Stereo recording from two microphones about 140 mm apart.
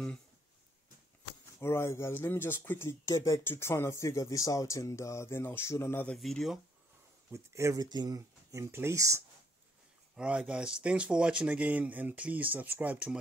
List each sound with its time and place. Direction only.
1.6 s speech: 20° left (ahead or behind)
6.0 s speech: 5° left (ahead or behind)
7.3 s speech: 20° right (ahead or behind)
10.1 s speech: 5° right (ahead or behind)